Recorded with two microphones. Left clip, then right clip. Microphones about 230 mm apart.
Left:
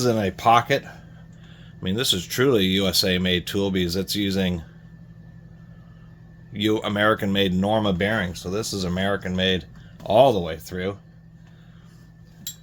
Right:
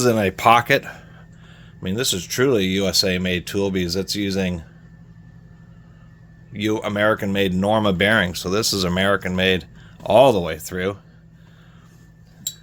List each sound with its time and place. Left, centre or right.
0.0 s speech: right
1.8 s speech: centre
6.5 s speech: centre; by 10.9 s right